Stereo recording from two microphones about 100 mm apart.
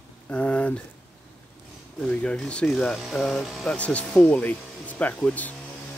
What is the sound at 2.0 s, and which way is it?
Speech, 10° left (ahead or behind).